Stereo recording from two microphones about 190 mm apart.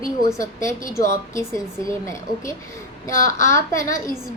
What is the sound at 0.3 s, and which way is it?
A child's voice, 15° left (ahead or behind).